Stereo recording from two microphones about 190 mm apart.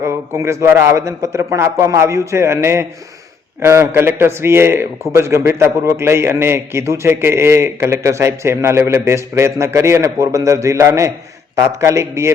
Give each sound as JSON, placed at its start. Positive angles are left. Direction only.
{"t": 0.0, "sound": "a man's voice", "side_deg": -15}